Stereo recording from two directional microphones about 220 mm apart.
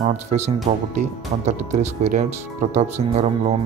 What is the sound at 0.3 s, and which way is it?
Speech, 30° right (ahead or behind).